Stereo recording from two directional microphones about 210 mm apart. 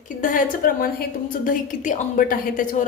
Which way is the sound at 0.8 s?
40° left (ahead or behind).